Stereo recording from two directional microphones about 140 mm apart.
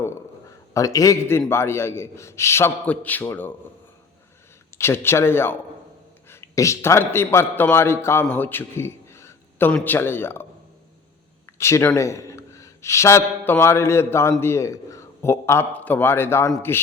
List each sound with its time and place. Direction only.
0.0 s a man's voice: 20° left (ahead or behind)
4.8 s a man's voice: 20° left (ahead or behind)
11.4 s a man's voice: 20° left (ahead or behind)